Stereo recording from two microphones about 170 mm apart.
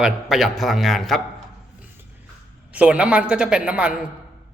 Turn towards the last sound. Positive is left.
turn(degrees=-5)  # may be behind; listen again after turning